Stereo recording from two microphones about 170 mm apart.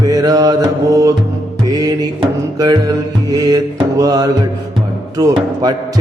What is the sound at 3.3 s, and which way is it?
Speech, 20° right (ahead or behind).